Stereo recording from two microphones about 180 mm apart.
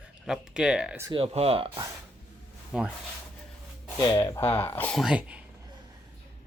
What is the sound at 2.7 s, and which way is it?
Speech, 5° right (ahead or behind).